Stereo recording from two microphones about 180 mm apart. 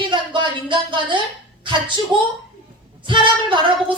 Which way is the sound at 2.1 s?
25° right (ahead or behind).